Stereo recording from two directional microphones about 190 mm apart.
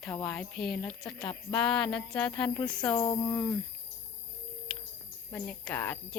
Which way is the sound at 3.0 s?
20° left (ahead or behind).